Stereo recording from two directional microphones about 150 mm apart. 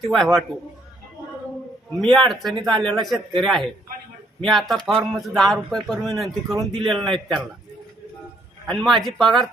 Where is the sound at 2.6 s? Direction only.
35° right (ahead or behind).